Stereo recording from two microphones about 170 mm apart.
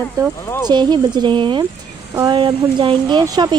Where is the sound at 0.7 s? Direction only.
25° right (ahead or behind).